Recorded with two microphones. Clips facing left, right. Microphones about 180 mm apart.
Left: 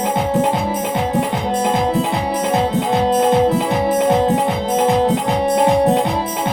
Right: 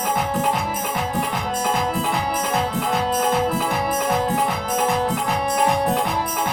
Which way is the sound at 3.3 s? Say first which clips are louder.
Left 7 dB; 25° left (ahead or behind).